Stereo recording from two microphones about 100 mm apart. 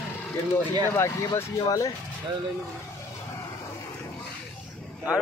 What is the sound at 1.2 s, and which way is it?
Speech, 35° left (ahead or behind).